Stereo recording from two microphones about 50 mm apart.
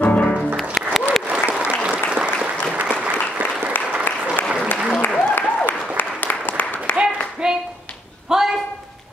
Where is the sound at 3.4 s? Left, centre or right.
Right.